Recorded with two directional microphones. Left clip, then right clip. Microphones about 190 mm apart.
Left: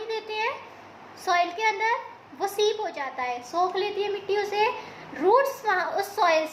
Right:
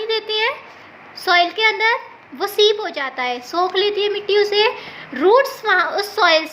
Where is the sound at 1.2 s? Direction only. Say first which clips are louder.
Right 8 dB; 45° right (ahead or behind).